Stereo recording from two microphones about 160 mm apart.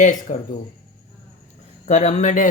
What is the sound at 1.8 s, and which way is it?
Speech, 45° left (ahead or behind).